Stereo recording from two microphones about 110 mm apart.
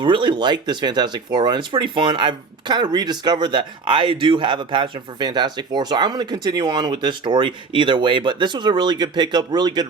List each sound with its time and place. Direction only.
0.0 s speech: 50° right (ahead or behind)